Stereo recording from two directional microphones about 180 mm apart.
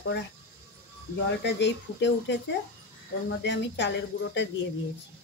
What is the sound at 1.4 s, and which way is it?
Speech, 80° left.